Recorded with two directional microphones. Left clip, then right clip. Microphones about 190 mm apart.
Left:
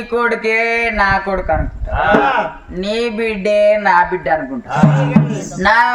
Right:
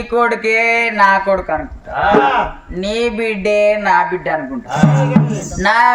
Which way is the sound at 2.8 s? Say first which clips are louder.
Right 1 dB; 5° right (ahead or behind).